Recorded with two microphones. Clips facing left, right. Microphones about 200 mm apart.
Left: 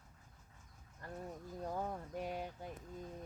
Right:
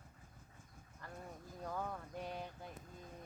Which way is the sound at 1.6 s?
25° left (ahead or behind).